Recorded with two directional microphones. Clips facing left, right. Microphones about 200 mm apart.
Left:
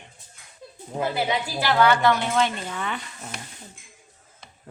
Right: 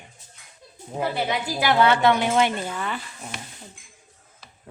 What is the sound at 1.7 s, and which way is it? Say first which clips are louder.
Speech: right 1 dB; 20° right (ahead or behind).